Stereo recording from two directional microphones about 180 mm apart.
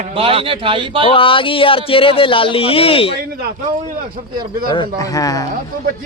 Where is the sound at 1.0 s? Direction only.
30° left (ahead or behind).